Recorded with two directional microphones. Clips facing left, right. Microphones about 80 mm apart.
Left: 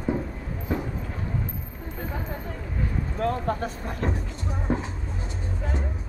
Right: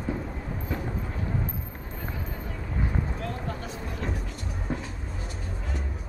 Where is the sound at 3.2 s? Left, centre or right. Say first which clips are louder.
Left 8 dB; left.